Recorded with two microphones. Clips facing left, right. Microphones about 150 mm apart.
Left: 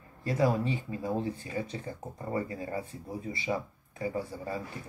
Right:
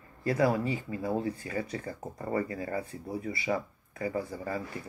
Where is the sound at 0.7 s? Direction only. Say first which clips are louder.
Right 1 dB; 15° left (ahead or behind).